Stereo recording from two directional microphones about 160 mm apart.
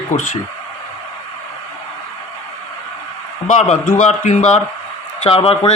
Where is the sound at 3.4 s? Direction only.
50° left (ahead or behind).